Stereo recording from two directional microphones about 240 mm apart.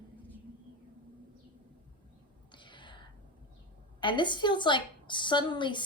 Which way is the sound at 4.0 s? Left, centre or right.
Centre.